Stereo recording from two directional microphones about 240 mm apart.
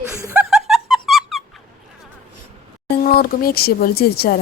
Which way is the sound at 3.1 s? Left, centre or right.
Left.